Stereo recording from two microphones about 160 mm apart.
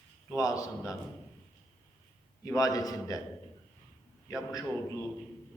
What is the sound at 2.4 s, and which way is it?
Speech, 20° left (ahead or behind).